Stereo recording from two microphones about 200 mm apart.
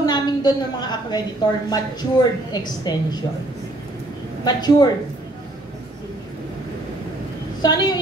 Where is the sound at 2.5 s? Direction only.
20° left (ahead or behind).